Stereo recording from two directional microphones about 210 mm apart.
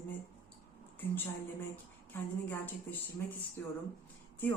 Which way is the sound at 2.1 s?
10° left (ahead or behind).